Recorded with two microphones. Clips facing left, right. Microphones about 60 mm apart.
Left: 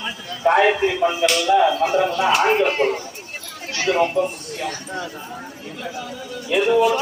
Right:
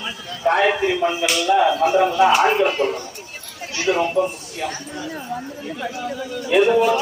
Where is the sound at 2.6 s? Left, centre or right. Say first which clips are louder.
Left 1 dB; left.